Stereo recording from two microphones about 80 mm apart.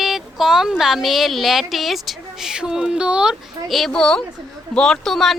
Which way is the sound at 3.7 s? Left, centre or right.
Centre.